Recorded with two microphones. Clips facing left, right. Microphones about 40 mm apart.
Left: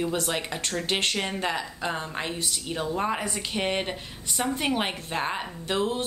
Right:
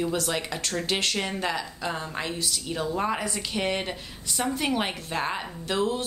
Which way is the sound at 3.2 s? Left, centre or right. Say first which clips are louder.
Even; left.